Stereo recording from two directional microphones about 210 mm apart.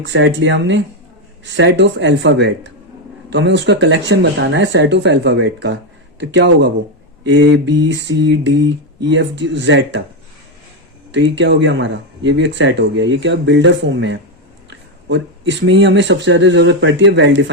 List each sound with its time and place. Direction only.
0.0 s speech: 60° right (ahead or behind)
11.1 s speech: 60° right (ahead or behind)